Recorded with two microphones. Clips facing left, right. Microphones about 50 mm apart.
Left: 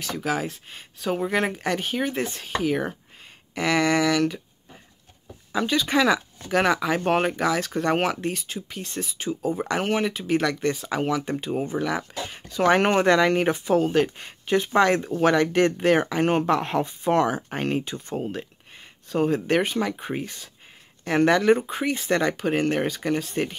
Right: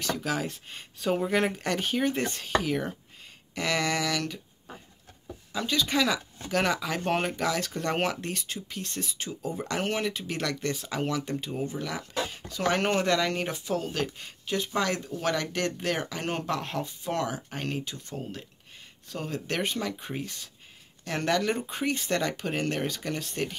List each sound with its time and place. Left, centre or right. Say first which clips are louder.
0.0 s speech: left 3 dB; centre
5.5 s speech: left 5 dB; left
9.5 s speech: left 6 dB; left
9.8 s speech: left 5 dB; centre
11.2 s speech: left 5 dB; left